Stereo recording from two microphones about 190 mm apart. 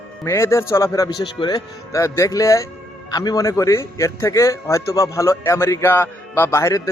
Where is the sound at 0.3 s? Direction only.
15° left (ahead or behind).